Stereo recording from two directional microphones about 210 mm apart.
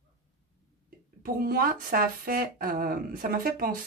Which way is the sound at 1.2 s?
45° right (ahead or behind).